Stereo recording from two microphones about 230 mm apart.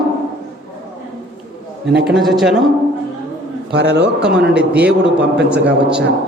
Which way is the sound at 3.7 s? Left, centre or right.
Right.